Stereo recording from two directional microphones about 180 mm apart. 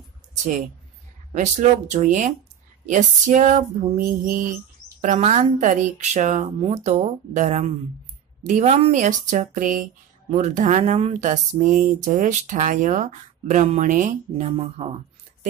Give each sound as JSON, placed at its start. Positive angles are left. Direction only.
{"t": 1.3, "sound": "speech", "side_deg": -40}
{"t": 5.0, "sound": "a woman's voice", "side_deg": -40}